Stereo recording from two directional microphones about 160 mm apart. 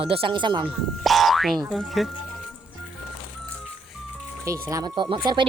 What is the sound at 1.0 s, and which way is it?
Boing, centre (ahead or behind).